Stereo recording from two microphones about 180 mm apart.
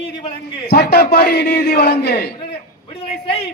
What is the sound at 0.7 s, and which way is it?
A man's voice, 65° left (ahead or behind).